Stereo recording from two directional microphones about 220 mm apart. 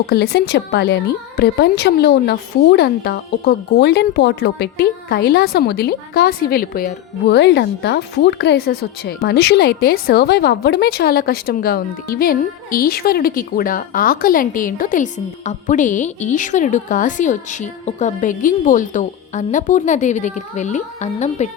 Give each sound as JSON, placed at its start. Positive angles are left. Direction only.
{"t": 0.1, "sound": "a woman's voice", "side_deg": 45}